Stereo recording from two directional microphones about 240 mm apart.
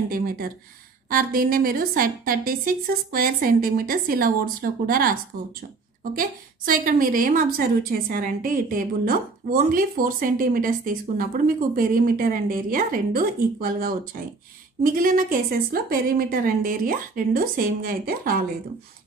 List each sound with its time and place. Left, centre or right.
1.1 s a woman's voice: right